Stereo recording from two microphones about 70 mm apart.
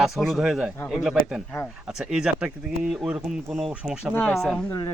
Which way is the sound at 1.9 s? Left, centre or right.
Centre.